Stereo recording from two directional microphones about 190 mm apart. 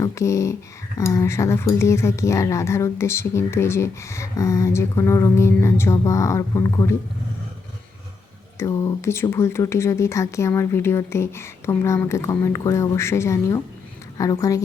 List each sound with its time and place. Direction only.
0.0 s speech: 15° left (ahead or behind)
8.5 s speech: 15° left (ahead or behind)